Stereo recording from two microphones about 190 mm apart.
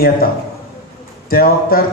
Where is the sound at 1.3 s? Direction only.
50° left (ahead or behind).